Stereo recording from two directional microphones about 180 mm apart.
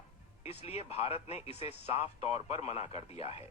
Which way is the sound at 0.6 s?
35° left (ahead or behind).